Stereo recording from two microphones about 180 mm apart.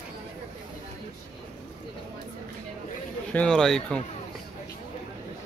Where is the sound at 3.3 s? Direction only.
5° left (ahead or behind).